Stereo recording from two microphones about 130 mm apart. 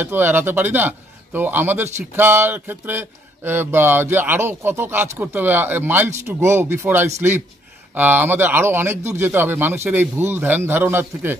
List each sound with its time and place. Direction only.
0.0 s a man's voice: 15° right (ahead or behind)